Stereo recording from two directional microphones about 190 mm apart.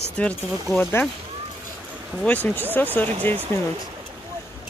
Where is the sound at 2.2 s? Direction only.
10° left (ahead or behind).